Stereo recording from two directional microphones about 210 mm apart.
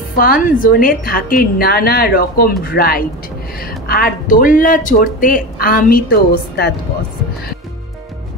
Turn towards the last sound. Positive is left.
turn(degrees=50)  # may be behind; listen again after turning